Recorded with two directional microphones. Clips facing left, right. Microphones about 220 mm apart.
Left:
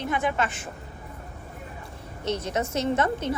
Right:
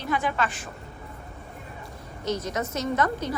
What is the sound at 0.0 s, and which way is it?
Speech, 20° left (ahead or behind).